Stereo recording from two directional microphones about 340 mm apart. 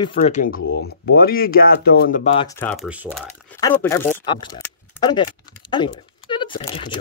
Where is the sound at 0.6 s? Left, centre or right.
Left; by 3.3 s centre.